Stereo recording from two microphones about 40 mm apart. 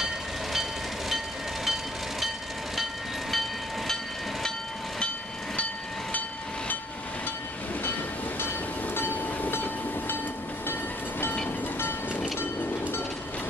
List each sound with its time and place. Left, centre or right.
0.0 s train: centre
8.9 s train: left